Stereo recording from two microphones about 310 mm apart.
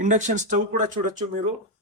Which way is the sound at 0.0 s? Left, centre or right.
Right.